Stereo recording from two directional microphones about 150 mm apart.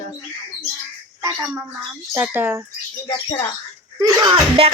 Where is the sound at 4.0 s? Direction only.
25° right (ahead or behind).